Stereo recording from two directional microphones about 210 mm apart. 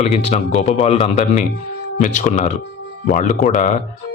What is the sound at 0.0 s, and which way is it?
Speech, 30° left (ahead or behind).